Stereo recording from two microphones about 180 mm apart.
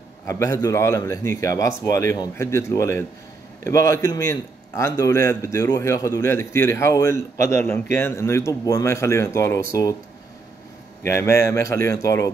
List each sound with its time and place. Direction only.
0.3 s a man's voice: 20° left (ahead or behind)
11.1 s a man's voice: 15° left (ahead or behind)